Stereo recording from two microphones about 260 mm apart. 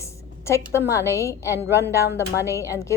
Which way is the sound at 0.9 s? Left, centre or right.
Centre.